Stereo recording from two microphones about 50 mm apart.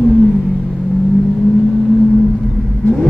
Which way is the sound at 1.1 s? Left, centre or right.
Centre.